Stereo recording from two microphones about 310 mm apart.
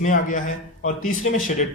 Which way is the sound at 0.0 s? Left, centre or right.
Left.